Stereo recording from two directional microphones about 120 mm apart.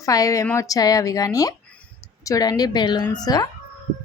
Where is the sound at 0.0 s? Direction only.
30° left (ahead or behind).